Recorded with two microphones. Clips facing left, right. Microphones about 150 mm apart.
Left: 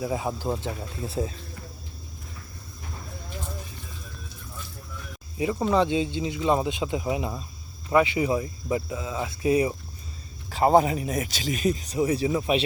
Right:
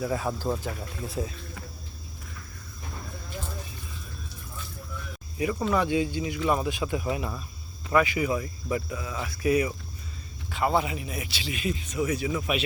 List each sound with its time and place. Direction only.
0.0 s speech: 15° left (ahead or behind)
5.4 s speech: 20° left (ahead or behind)
10.5 s speech: 40° left (ahead or behind)